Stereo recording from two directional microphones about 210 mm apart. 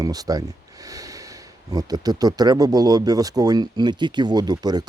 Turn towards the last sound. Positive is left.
turn(degrees=-20)  # may be behind; listen again after turning